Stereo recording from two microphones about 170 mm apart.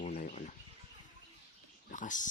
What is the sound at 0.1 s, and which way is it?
Chicken, 50° left (ahead or behind).